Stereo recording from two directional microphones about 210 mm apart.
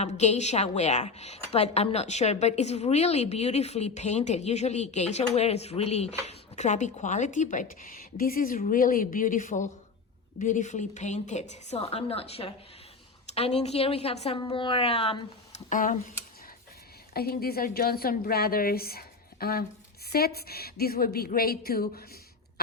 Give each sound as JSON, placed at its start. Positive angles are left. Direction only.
{"t": 0.0, "sound": "a woman's voice", "side_deg": 30}
{"t": 17.2, "sound": "a woman's voice", "side_deg": 45}